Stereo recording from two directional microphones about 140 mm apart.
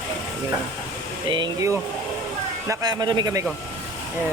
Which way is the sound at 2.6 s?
20° right (ahead or behind).